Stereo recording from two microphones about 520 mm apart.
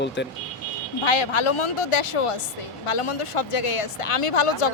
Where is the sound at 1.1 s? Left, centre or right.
Left.